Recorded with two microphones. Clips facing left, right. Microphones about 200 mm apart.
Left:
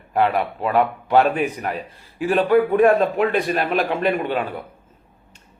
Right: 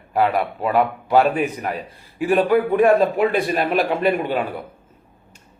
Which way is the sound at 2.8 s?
5° right (ahead or behind).